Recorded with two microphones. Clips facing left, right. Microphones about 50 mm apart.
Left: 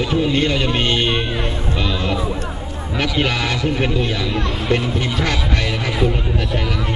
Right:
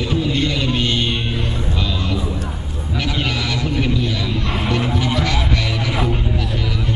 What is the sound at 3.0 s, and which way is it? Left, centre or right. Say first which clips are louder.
Speech: left 3 dB; left.